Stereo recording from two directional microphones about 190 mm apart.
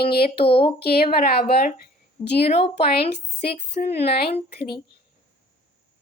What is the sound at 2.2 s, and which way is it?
Speech, 25° left (ahead or behind).